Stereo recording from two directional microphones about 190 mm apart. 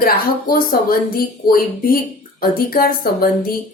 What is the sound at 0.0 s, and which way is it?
A woman's voice, 50° left (ahead or behind).